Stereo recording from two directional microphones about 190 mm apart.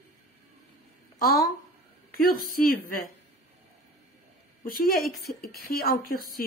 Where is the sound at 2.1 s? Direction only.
50° left (ahead or behind).